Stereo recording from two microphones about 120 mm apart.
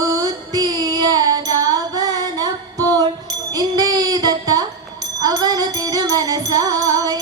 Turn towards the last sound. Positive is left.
turn(degrees=-30)  # may be behind; listen again after turning